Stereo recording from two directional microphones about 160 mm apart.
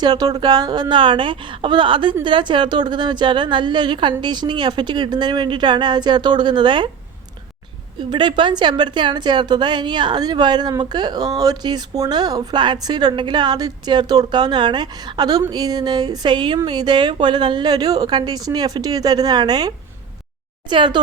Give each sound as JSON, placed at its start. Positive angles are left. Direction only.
{"t": 0.0, "sound": "a woman's voice", "side_deg": -25}
{"t": 7.9, "sound": "a woman's voice", "side_deg": -30}